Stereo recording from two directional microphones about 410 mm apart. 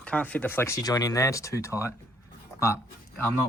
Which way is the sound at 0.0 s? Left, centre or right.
Centre.